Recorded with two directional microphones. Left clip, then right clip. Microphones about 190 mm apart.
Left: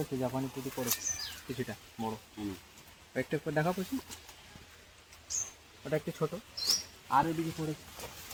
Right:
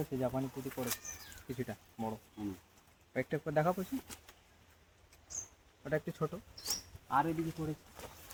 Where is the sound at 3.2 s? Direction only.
15° right (ahead or behind).